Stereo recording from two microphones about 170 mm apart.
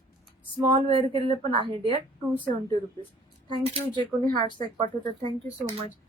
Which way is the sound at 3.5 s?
30° right (ahead or behind).